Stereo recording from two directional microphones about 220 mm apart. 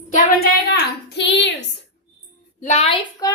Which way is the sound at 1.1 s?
55° left (ahead or behind).